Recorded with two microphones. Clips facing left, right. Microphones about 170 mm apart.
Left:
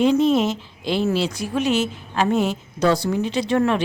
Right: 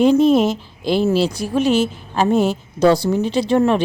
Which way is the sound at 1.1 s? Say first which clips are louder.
Right 5 dB; 35° right (ahead or behind).